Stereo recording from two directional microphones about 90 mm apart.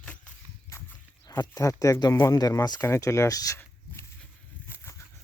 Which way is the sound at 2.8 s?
30° left (ahead or behind).